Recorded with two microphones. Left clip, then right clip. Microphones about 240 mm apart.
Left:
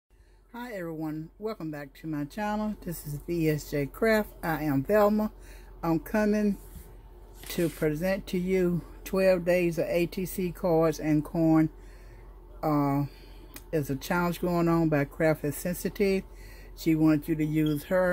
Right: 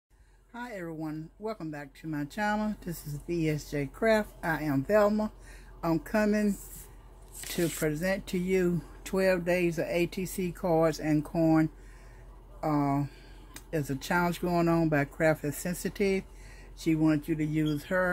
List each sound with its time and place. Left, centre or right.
0.5 s speech: centre